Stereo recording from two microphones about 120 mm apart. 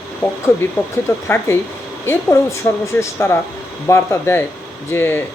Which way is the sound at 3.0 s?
20° left (ahead or behind).